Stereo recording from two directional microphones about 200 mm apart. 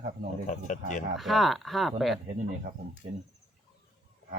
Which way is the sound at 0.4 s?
40° left (ahead or behind).